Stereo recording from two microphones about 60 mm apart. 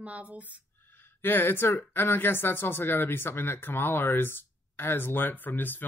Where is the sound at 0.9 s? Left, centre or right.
Left.